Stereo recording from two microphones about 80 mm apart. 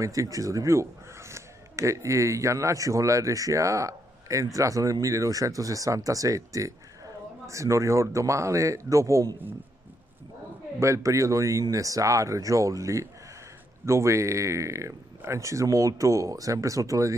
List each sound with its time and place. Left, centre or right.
0.0 s speech: right
10.8 s speech: right